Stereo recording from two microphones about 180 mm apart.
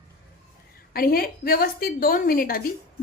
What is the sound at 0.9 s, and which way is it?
A woman's voice, 55° left (ahead or behind).